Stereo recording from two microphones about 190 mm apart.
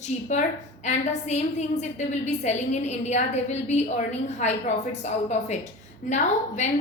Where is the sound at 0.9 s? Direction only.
35° left (ahead or behind).